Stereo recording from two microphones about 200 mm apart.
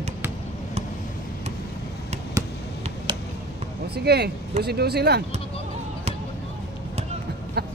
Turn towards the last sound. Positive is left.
turn(degrees=-55)  # may be behind; listen again after turning